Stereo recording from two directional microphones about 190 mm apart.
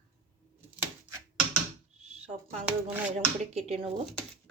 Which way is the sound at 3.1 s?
35° right (ahead or behind).